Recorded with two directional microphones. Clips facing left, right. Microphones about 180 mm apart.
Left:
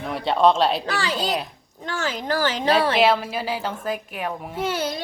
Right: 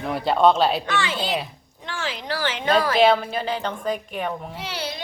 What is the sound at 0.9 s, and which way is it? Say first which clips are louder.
Speech: even; 35° left (ahead or behind).